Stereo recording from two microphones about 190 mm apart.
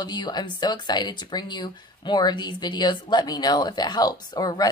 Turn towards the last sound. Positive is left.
turn(degrees=20)  # may be behind; listen again after turning